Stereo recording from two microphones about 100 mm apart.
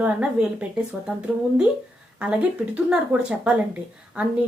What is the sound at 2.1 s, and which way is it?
Speech, 10° right (ahead or behind).